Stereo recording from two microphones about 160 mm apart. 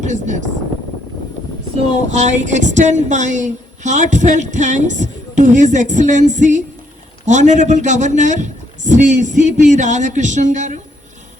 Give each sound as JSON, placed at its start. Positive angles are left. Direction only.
{"t": 0.0, "sound": "speech", "side_deg": -50}
{"t": 2.0, "sound": "a woman's voice", "side_deg": -50}